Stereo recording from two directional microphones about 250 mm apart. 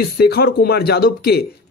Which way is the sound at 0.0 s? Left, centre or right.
Left.